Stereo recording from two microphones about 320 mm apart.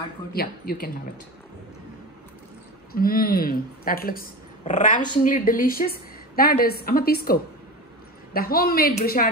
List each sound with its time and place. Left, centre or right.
0.3 s a woman's voice: left
2.9 s a woman's voice: left